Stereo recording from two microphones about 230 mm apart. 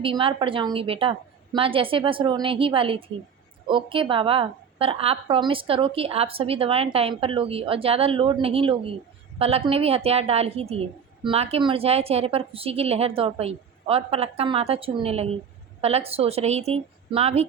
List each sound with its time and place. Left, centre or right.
0.0 s a woman's voice: right